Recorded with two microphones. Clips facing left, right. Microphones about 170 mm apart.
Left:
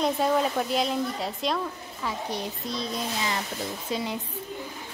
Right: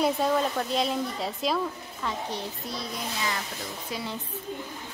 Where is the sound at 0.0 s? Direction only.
5° left (ahead or behind).